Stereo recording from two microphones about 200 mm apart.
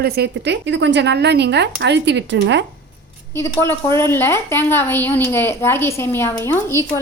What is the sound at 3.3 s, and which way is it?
A woman's voice, 10° left (ahead or behind).